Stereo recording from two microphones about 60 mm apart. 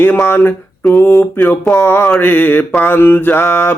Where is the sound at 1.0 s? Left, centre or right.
Left.